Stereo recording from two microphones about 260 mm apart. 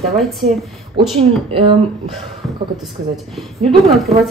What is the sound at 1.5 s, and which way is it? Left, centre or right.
Speech, right.